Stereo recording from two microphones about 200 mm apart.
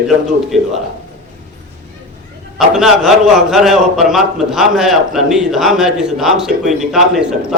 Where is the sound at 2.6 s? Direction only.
Centre (ahead or behind).